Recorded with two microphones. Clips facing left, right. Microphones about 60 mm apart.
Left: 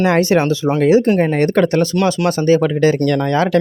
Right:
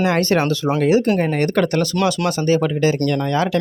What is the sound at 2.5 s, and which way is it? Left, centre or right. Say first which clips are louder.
Speech: left 4 dB; left.